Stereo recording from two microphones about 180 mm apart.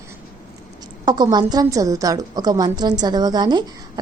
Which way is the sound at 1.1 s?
25° right (ahead or behind).